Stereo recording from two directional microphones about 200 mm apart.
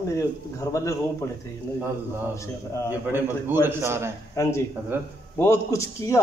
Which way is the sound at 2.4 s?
15° left (ahead or behind).